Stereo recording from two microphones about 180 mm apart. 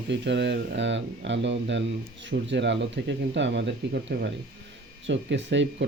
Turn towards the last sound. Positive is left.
turn(degrees=-90)